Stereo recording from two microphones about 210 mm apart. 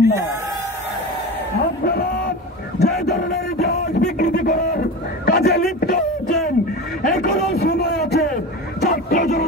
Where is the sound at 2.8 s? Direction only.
50° left (ahead or behind).